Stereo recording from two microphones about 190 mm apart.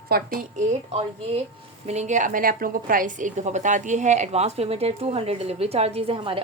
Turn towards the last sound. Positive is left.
turn(degrees=-30)  # may be behind; listen again after turning